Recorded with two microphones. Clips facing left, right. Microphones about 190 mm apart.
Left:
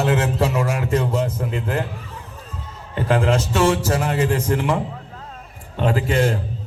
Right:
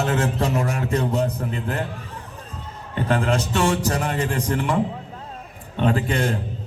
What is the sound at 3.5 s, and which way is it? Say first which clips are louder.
Speech: left 4 dB; 40° left (ahead or behind).